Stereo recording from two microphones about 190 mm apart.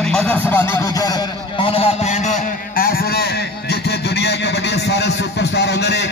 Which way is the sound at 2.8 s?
55° left (ahead or behind).